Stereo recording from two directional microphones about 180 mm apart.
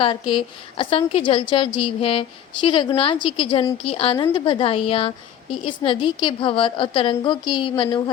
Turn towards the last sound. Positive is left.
turn(degrees=25)  # may be behind; listen again after turning